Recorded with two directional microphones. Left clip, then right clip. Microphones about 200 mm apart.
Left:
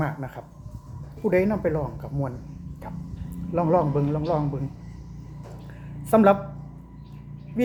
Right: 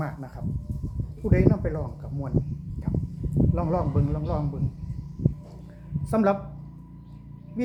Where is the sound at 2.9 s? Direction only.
5° left (ahead or behind).